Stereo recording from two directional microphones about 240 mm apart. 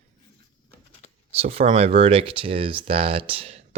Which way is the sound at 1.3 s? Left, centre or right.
Right.